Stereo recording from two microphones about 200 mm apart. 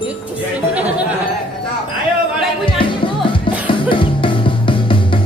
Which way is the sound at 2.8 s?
25° left (ahead or behind).